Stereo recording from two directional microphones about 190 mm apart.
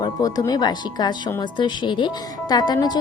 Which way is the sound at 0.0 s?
20° left (ahead or behind).